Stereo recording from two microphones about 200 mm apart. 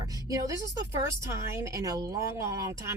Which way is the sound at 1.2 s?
15° right (ahead or behind).